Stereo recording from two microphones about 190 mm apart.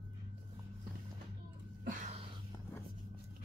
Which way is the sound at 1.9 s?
35° right (ahead or behind).